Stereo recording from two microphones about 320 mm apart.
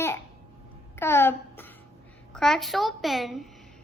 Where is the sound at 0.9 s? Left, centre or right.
Centre.